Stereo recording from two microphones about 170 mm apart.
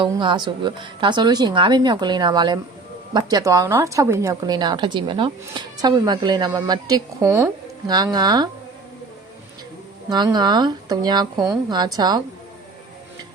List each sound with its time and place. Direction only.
0.0 s a woman's voice: 30° right (ahead or behind)
10.1 s a woman's voice: 25° right (ahead or behind)